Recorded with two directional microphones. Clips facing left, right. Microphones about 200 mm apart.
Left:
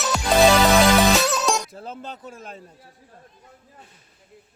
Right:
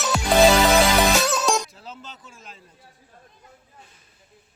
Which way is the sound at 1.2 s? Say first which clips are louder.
Even; centre (ahead or behind).